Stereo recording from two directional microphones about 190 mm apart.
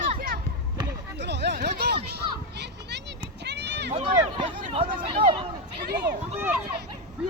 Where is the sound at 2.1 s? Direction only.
60° right (ahead or behind).